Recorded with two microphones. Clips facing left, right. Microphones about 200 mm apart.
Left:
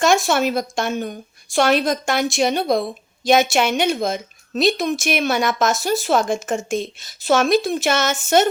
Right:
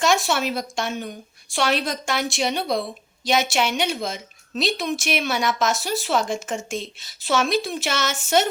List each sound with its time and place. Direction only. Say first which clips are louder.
0.0 s a woman's voice: left 4 dB; 45° left (ahead or behind)